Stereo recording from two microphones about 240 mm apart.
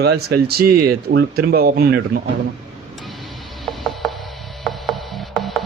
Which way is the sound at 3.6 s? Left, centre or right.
Centre.